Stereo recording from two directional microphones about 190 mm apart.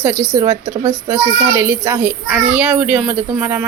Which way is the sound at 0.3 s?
15° right (ahead or behind).